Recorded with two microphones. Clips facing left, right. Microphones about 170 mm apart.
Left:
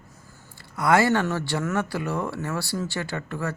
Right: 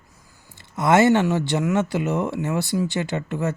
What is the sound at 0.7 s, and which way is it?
Speech, 20° right (ahead or behind).